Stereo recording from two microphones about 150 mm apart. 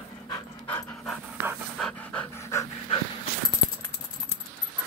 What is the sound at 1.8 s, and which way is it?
Pant, 5° left (ahead or behind).